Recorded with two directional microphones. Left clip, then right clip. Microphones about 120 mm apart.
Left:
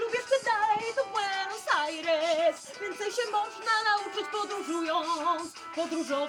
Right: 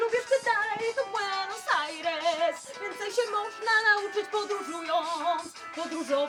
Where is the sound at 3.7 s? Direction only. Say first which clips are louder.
Right 5 dB; 15° right (ahead or behind).